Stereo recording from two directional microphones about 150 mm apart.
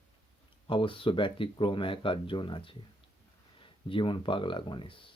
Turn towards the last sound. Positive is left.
turn(degrees=35)  # may be behind; listen again after turning